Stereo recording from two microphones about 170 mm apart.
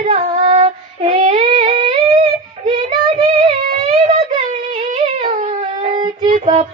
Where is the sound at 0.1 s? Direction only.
35° right (ahead or behind).